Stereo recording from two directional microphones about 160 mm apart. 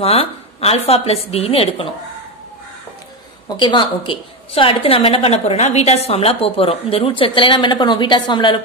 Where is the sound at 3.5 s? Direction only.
30° left (ahead or behind).